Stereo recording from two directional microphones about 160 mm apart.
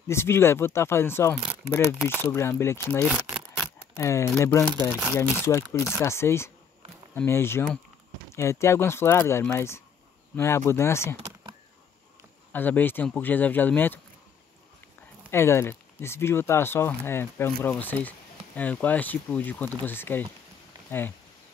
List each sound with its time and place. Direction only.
0.1 s speech: 15° left (ahead or behind)
3.3 s rub: 5° right (ahead or behind)
3.9 s speech: 20° left (ahead or behind)
12.5 s speech: 10° left (ahead or behind)
15.3 s speech: 15° left (ahead or behind)